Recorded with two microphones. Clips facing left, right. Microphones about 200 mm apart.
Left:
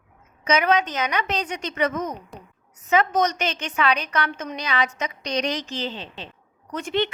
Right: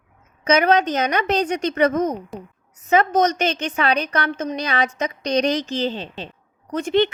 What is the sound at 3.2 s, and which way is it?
A woman's voice, 45° right (ahead or behind).